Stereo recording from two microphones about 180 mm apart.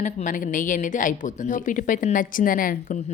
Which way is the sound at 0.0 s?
45° left (ahead or behind).